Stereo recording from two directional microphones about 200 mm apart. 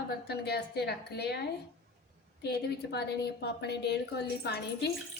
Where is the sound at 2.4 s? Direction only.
55° left (ahead or behind).